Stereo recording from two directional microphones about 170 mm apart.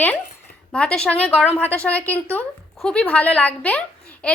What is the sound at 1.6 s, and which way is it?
A woman's voice, 10° left (ahead or behind).